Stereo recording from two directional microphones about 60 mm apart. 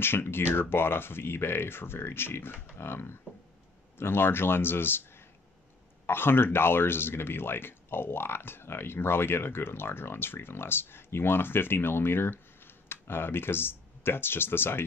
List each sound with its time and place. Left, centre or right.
0.0 s speech: left
6.0 s speech: left